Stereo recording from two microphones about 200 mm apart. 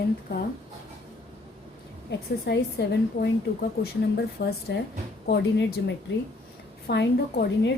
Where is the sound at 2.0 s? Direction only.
55° left (ahead or behind).